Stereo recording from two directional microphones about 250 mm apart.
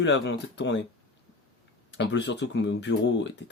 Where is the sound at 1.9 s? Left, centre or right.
Left.